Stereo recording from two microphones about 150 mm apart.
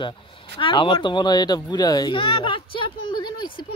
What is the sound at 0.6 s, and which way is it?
A child's voice, 35° left (ahead or behind).